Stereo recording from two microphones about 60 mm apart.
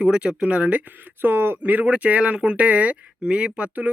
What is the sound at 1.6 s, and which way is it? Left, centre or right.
Speech, right.